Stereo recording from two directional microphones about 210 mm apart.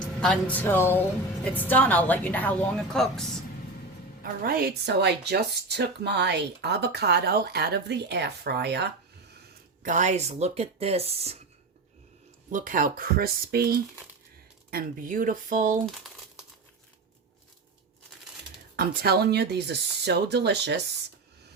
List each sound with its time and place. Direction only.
0.0 s a woman's voice: 5° left (ahead or behind)
4.2 s speech: 45° right (ahead or behind)
9.8 s speech: 35° right (ahead or behind)
12.5 s speech: 40° right (ahead or behind)
15.9 s crumpling: centre (ahead or behind)
18.8 s speech: 50° right (ahead or behind)